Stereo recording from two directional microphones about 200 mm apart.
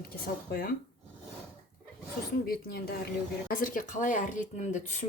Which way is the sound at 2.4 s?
50° left (ahead or behind).